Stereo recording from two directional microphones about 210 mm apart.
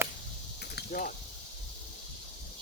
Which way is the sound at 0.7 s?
45° left (ahead or behind).